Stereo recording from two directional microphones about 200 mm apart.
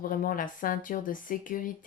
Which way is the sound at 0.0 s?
45° left (ahead or behind).